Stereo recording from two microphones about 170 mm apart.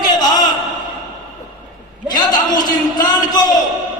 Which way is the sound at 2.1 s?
25° left (ahead or behind).